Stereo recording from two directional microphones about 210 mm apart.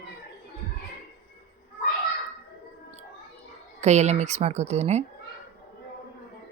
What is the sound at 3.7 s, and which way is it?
A woman's voice, 35° right (ahead or behind).